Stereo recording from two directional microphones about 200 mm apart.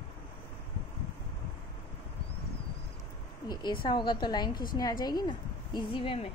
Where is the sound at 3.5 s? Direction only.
20° left (ahead or behind).